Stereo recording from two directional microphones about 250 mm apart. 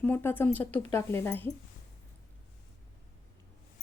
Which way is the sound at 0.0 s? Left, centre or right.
Centre.